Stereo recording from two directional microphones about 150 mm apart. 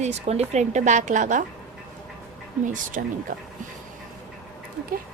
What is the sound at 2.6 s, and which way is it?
Speech, 60° right (ahead or behind).